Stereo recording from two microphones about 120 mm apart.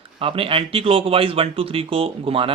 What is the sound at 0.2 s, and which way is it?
Speech, 50° right (ahead or behind).